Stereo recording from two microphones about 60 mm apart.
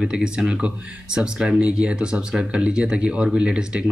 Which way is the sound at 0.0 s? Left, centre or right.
Centre.